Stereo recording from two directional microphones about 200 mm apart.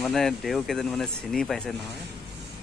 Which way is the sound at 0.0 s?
Centre (ahead or behind).